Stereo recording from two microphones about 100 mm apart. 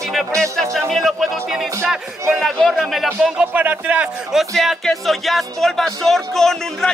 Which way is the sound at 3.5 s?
15° right (ahead or behind).